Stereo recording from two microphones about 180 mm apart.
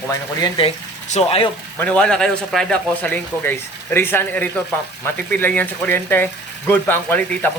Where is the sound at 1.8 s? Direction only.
5° left (ahead or behind).